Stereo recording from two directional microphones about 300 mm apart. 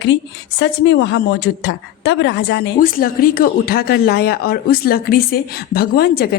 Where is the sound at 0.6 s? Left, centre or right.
Left.